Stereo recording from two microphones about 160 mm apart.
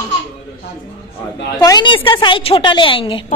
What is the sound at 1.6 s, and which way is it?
A woman's voice, 25° left (ahead or behind).